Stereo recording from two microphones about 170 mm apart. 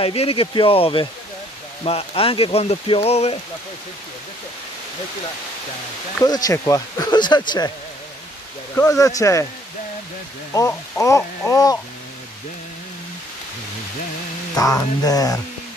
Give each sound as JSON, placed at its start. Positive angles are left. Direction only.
{"t": 0.0, "sound": "speech", "side_deg": 35}
{"t": 6.2, "sound": "speech", "side_deg": 20}
{"t": 8.7, "sound": "speech", "side_deg": 20}
{"t": 10.5, "sound": "speech", "side_deg": 20}
{"t": 14.5, "sound": "speech", "side_deg": 20}